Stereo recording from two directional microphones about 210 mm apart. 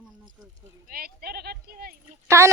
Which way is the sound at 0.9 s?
45° right (ahead or behind).